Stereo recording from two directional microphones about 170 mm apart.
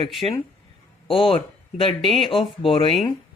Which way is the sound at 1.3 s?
30° left (ahead or behind).